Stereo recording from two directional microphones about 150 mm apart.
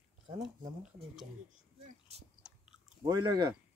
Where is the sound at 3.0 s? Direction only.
25° right (ahead or behind).